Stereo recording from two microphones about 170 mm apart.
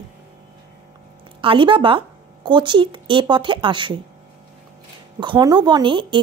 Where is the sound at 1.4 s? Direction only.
30° right (ahead or behind).